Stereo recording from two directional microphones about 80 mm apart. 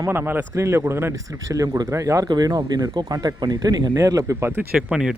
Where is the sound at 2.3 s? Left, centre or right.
Right.